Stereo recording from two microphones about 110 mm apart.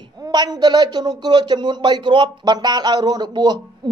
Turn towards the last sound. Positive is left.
turn(degrees=-45)  # may be behind; listen again after turning